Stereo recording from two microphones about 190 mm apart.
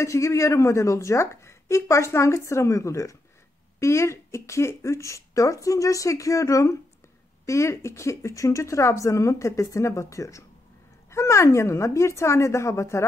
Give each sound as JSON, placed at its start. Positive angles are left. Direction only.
{"t": 0.0, "sound": "speech", "side_deg": 15}